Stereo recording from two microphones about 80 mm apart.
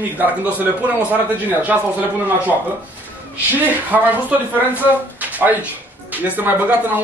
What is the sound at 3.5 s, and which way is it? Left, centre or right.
A man's voice, right.